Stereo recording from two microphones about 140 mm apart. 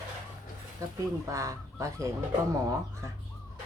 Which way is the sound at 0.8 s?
25° right (ahead or behind).